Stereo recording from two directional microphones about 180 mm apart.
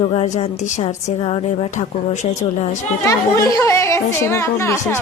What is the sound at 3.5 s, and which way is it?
Speech, 15° left (ahead or behind).